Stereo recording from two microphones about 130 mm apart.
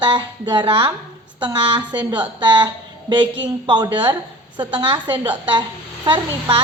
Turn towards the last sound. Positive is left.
turn(degrees=-35)  # may be behind; listen again after turning